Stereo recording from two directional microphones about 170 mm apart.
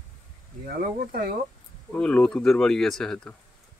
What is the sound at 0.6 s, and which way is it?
Speech, 60° right (ahead or behind).